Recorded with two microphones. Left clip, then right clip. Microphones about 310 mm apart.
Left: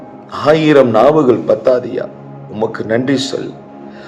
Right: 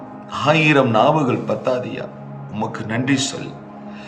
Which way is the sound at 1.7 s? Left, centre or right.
Centre.